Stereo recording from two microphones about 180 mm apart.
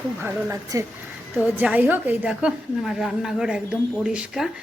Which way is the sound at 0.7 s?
15° right (ahead or behind).